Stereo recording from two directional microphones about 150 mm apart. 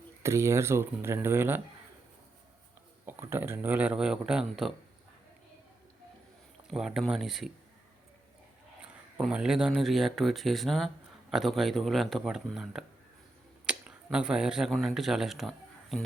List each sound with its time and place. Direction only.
0.2 s speech: 20° right (ahead or behind)
3.1 s speech: 15° right (ahead or behind)
6.7 s speech: 5° right (ahead or behind)
9.1 s speech: 5° right (ahead or behind)